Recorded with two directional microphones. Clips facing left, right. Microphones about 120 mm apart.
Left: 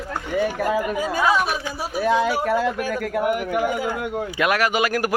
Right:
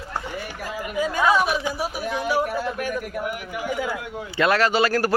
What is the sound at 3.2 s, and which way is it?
Speech, 55° left (ahead or behind).